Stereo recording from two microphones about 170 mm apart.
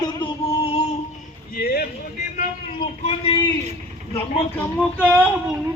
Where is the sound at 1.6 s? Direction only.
65° left (ahead or behind).